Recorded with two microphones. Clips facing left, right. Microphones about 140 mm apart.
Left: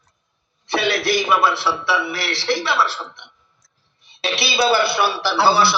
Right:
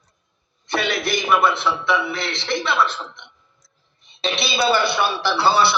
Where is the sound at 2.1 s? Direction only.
20° right (ahead or behind).